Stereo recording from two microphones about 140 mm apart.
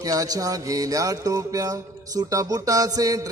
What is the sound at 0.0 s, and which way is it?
Music, 25° right (ahead or behind).